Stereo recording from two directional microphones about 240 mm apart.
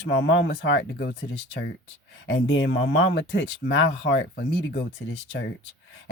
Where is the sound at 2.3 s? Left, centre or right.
Left.